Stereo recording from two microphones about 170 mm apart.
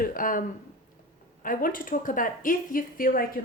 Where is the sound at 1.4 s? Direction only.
55° left (ahead or behind).